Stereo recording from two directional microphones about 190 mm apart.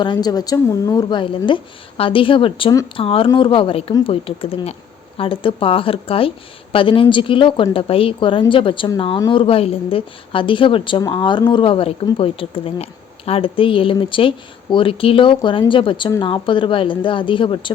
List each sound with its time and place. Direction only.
0.0 s a woman's voice: 20° left (ahead or behind)